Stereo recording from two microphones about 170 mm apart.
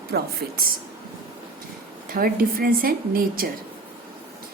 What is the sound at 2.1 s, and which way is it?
A woman's voice, 60° right (ahead or behind).